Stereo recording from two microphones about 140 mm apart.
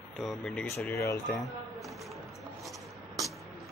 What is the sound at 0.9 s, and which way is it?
Speech, 20° left (ahead or behind).